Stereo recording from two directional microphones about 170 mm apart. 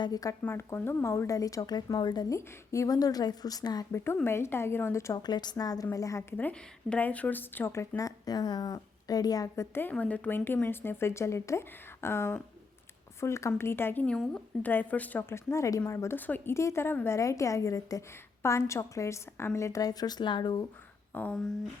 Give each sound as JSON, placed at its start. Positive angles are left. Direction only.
{"t": 0.0, "sound": "a woman's voice", "side_deg": 20}
{"t": 21.1, "sound": "speech", "side_deg": 10}